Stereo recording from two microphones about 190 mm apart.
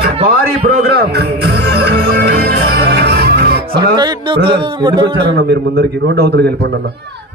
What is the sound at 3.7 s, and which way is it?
Speech, 25° right (ahead or behind).